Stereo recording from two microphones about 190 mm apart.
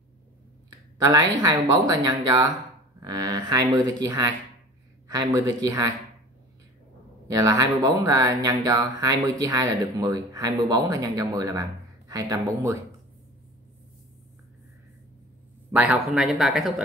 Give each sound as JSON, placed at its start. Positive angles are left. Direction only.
{"t": 0.9, "sound": "speech", "side_deg": -20}
{"t": 7.3, "sound": "speech", "side_deg": -20}
{"t": 15.7, "sound": "speech", "side_deg": -10}